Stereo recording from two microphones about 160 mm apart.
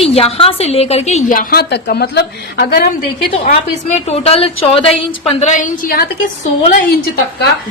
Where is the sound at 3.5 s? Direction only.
40° left (ahead or behind); by 6.0 s 60° left (ahead or behind).